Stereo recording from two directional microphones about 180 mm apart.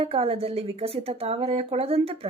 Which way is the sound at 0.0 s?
35° right (ahead or behind).